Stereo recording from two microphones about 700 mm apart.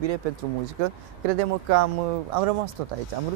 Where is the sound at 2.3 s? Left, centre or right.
Right.